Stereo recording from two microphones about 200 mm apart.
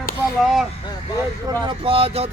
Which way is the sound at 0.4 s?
Centre (ahead or behind).